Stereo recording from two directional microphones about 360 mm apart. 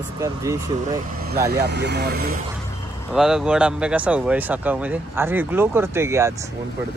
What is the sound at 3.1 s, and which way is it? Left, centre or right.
Speech, centre.